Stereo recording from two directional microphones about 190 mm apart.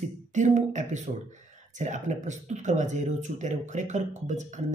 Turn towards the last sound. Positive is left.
turn(degrees=-40)  # may be behind; listen again after turning